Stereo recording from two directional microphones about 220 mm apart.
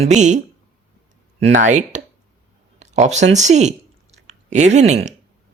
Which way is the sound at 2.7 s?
30° right (ahead or behind).